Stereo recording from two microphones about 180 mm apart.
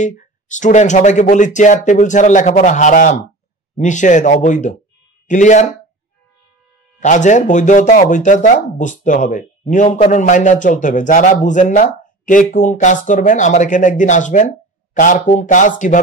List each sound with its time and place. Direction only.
0.0 s speech: 45° left (ahead or behind)
7.0 s speech: 45° left (ahead or behind)